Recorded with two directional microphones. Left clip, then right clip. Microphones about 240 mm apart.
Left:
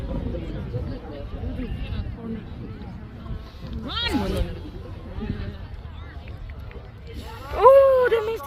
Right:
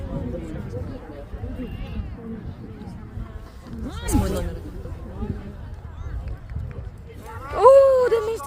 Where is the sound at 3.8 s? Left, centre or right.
Centre.